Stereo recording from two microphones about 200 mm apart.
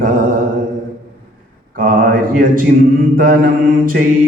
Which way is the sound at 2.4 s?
45° right (ahead or behind).